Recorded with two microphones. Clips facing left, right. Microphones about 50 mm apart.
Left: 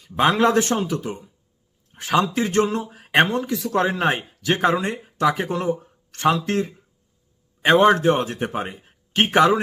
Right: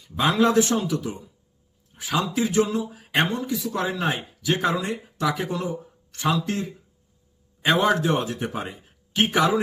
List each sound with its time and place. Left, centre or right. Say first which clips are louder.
0.0 s a man's voice: left 3 dB; left
1.9 s speech: left 5 dB; left
7.6 s a man's voice: left 5 dB; left